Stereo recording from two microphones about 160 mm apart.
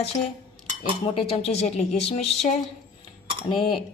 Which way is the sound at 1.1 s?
40° left (ahead or behind).